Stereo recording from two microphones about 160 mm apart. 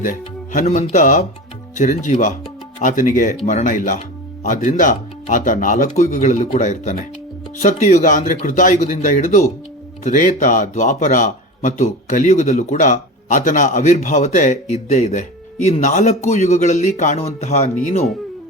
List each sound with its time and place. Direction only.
0.0 s speech: 55° left (ahead or behind)